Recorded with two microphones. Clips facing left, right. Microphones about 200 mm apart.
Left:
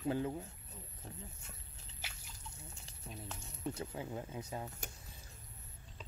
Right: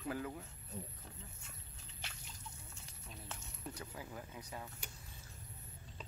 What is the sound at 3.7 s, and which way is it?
Speech, 25° left (ahead or behind).